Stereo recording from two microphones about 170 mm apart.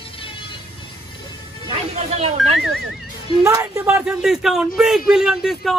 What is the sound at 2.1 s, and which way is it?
Speech, 40° right (ahead or behind).